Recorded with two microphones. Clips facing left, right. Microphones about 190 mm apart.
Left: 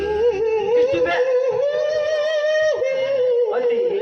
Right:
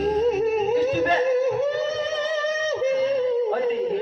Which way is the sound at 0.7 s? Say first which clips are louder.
Left 5 dB; 70° left (ahead or behind).